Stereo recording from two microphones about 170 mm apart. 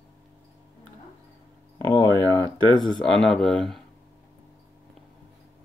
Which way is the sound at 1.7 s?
25° left (ahead or behind).